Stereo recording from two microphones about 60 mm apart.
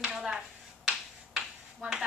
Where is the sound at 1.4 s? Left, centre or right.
Centre.